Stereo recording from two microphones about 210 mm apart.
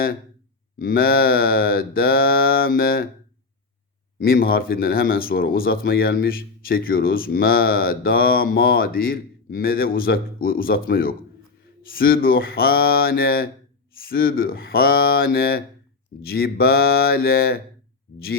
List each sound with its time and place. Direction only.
0.8 s speech: 45° left (ahead or behind)
4.2 s speech: 45° left (ahead or behind)